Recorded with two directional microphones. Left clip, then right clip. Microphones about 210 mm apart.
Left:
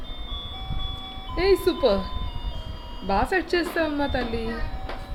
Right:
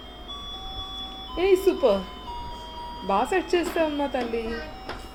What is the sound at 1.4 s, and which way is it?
Music, 10° left (ahead or behind).